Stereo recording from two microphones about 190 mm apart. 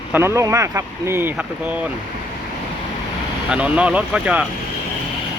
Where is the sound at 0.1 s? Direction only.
15° right (ahead or behind).